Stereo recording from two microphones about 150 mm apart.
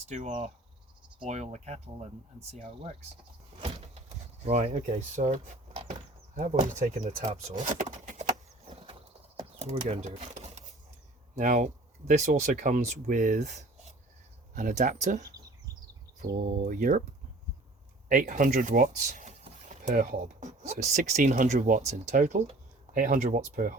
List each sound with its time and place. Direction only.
0.1 s speech: 50° right (ahead or behind)
4.4 s speech: 50° right (ahead or behind)
7.3 s vehicle: 50° right (ahead or behind)
9.6 s speech: 45° right (ahead or behind)
16.2 s speech: 60° right (ahead or behind)
18.1 s speech: 65° right (ahead or behind)